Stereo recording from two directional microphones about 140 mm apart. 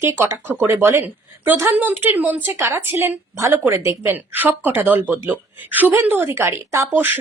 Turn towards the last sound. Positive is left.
turn(degrees=-15)  # may be behind; listen again after turning